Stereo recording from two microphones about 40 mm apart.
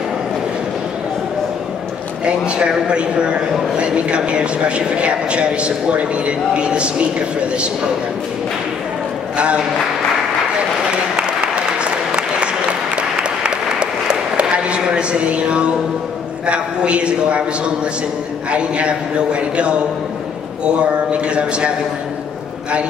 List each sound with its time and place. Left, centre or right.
2.2 s a man's voice: right
10.9 s applause: right
16.4 s a man's voice: right
18.5 s a man's voice: right